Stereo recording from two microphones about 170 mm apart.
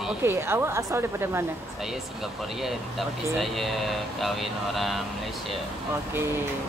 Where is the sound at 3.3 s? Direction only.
Centre (ahead or behind).